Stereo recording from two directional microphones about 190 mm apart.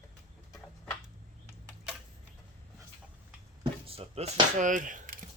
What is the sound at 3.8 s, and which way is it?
Speech, 30° right (ahead or behind).